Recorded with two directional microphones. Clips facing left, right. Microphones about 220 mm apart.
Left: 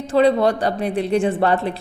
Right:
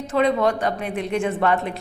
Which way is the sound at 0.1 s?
35° left (ahead or behind).